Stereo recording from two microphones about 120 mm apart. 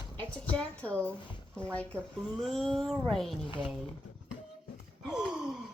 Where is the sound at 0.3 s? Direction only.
10° left (ahead or behind).